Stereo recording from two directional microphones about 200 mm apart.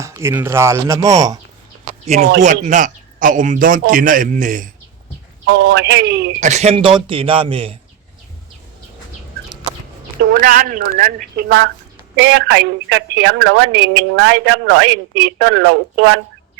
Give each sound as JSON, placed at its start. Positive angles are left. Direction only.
{"t": 0.0, "sound": "speech", "side_deg": -10}
{"t": 1.8, "sound": "a sound", "side_deg": -35}
{"t": 2.4, "sound": "a man's voice", "side_deg": -40}
{"t": 5.5, "sound": "speech", "side_deg": -55}
{"t": 6.4, "sound": "a man's voice", "side_deg": -35}
{"t": 10.2, "sound": "speech", "side_deg": -45}
{"t": 11.4, "sound": "speech", "side_deg": -60}